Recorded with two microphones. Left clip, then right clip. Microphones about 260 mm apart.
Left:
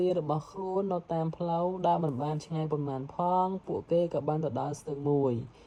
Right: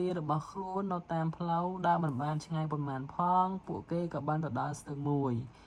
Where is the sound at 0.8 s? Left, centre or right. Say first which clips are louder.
Left 5 dB; right.